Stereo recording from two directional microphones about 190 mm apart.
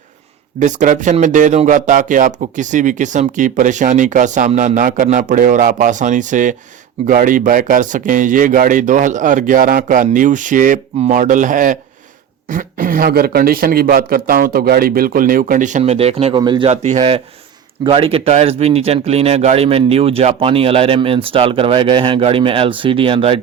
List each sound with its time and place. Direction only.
0.6 s speech: 40° right (ahead or behind); by 16.6 s 25° right (ahead or behind)
16.6 s speech: 35° right (ahead or behind)